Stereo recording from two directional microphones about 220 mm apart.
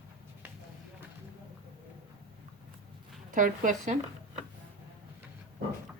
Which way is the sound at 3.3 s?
35° right (ahead or behind).